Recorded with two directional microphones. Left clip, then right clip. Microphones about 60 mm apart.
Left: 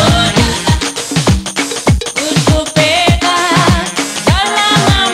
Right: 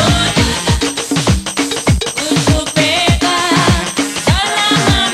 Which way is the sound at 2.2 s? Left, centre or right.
Left.